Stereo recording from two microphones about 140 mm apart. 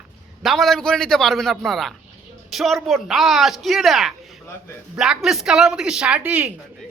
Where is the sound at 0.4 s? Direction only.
Centre (ahead or behind).